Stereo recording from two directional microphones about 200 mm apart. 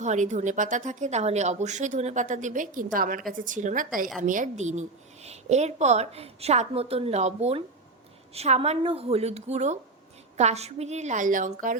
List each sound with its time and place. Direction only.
0.0 s speech: 35° right (ahead or behind)